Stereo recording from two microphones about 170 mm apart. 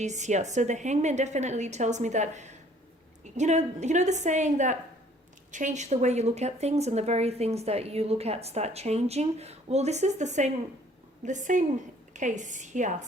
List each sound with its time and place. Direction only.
0.0 s a woman's voice: 45° right (ahead or behind)